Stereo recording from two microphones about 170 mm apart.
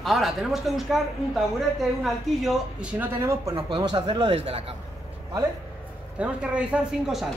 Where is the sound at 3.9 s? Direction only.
30° right (ahead or behind).